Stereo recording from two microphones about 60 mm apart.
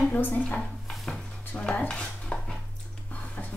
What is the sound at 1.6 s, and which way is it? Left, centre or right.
Dishes, centre.